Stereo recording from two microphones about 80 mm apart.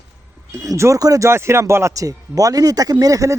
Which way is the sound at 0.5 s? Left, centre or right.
Right.